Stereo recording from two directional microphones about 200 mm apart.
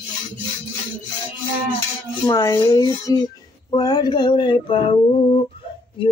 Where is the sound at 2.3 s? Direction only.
20° left (ahead or behind).